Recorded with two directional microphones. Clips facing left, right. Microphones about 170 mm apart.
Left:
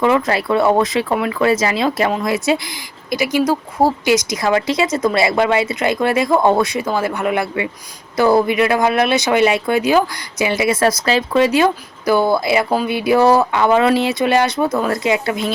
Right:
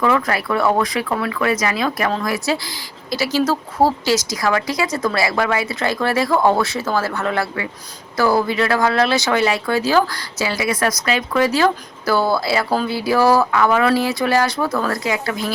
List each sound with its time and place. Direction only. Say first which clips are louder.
0.0 s speech: left 3 dB; 25° left (ahead or behind)